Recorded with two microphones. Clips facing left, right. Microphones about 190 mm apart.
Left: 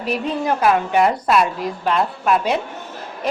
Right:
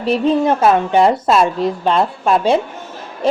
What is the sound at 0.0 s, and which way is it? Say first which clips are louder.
A woman's voice: right 7 dB; 25° right (ahead or behind).